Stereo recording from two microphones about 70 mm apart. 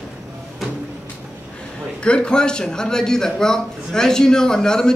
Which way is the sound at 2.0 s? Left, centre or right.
Centre.